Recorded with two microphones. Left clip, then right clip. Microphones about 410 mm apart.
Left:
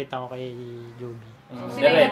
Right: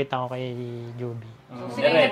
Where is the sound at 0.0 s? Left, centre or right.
Right.